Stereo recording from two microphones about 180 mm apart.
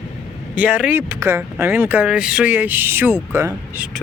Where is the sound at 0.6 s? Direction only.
5° right (ahead or behind).